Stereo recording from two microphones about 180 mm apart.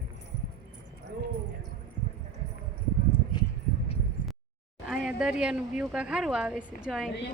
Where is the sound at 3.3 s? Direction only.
25° left (ahead or behind).